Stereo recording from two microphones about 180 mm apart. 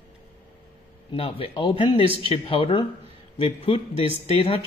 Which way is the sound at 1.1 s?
30° left (ahead or behind).